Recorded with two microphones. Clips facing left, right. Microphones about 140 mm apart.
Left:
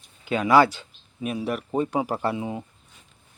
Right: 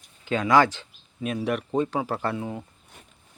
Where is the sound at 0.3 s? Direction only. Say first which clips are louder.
Left 2 dB; 15° left (ahead or behind).